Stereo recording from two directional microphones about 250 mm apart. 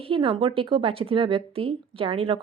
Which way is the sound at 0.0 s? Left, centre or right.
Right.